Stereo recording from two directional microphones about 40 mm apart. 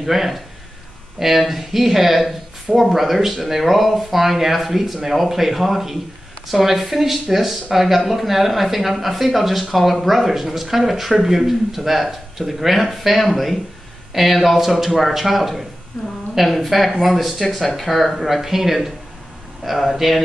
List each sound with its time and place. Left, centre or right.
0.0 s speech: centre